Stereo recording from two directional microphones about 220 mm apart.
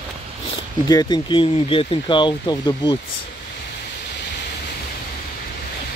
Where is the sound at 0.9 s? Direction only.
20° left (ahead or behind).